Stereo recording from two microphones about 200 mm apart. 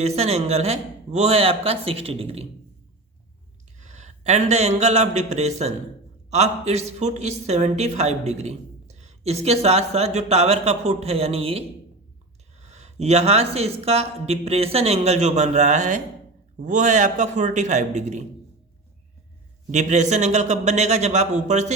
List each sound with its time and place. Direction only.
0.0 s speech: 30° right (ahead or behind)
3.8 s a woman's voice: 35° right (ahead or behind)
19.7 s a woman's voice: 35° right (ahead or behind)